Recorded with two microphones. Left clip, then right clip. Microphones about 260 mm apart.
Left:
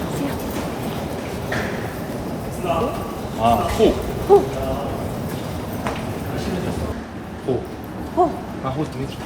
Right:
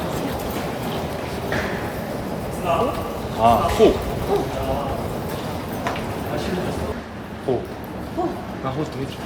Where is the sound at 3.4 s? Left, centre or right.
Centre.